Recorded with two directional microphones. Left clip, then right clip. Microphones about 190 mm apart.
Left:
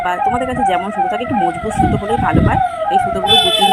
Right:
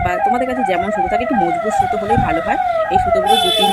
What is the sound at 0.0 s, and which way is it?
Police car, 15° right (ahead or behind).